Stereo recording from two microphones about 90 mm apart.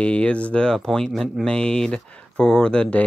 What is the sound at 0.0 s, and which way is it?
Speech, 15° left (ahead or behind).